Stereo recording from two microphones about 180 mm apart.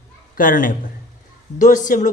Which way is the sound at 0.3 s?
50° left (ahead or behind).